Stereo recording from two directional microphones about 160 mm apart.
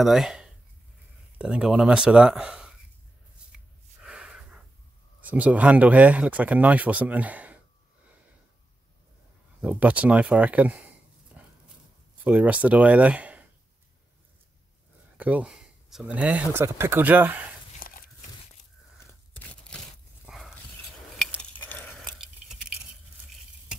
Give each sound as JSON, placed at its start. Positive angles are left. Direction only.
{"t": 0.0, "sound": "speech", "side_deg": 0}
{"t": 4.0, "sound": "a sound", "side_deg": -5}
{"t": 5.2, "sound": "speech", "side_deg": -10}
{"t": 9.6, "sound": "speech", "side_deg": -10}
{"t": 11.4, "sound": "dog", "side_deg": -5}
{"t": 12.3, "sound": "speech", "side_deg": -10}
{"t": 15.1, "sound": "speech", "side_deg": -10}
{"t": 17.7, "sound": "dog", "side_deg": 60}
{"t": 19.3, "sound": "a sound", "side_deg": 10}
{"t": 20.2, "sound": "dog", "side_deg": 0}
{"t": 21.4, "sound": "a sound", "side_deg": 10}